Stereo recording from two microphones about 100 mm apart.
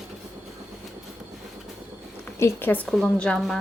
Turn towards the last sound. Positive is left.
turn(degrees=5)  # may be behind; listen again after turning